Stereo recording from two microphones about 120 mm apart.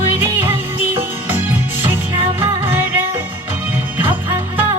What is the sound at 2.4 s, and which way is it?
Music, 15° right (ahead or behind).